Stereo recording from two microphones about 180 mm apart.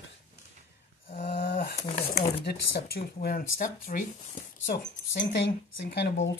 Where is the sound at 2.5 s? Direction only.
65° left (ahead or behind).